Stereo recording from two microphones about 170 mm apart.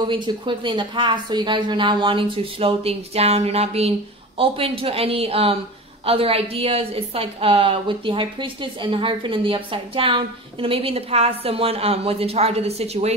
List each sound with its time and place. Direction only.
0.0 s a woman's voice: 30° right (ahead or behind)